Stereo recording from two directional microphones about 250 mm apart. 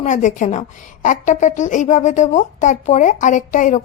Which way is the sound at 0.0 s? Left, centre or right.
Left.